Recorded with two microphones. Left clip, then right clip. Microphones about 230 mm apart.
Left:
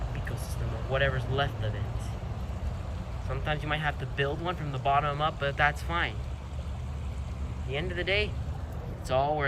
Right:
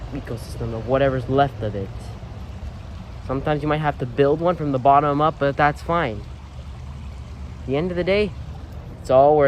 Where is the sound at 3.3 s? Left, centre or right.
Centre.